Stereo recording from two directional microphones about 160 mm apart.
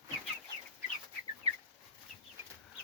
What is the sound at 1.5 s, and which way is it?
Chicken, 40° right (ahead or behind).